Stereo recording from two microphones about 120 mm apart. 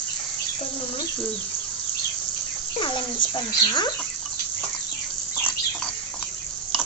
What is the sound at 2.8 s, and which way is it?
Speech, 45° left (ahead or behind).